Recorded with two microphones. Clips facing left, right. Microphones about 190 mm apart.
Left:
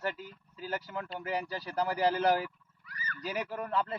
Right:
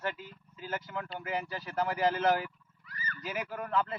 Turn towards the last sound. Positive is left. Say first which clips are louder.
# right 1 dB
turn(degrees=35)  # may be behind; listen again after turning